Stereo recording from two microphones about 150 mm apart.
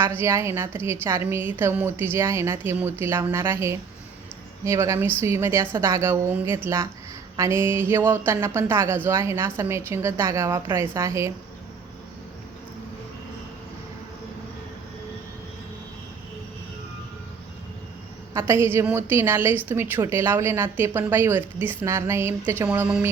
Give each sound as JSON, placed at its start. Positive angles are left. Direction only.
{"t": 0.0, "sound": "a woman's voice", "side_deg": -15}
{"t": 18.3, "sound": "speech", "side_deg": -15}